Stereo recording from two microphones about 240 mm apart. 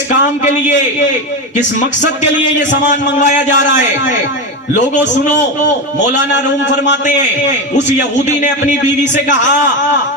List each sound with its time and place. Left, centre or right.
2.6 s a man's voice: left
7.9 s a man's voice: left